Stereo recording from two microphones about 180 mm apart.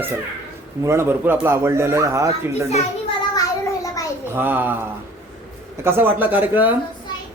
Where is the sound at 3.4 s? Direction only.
20° left (ahead or behind).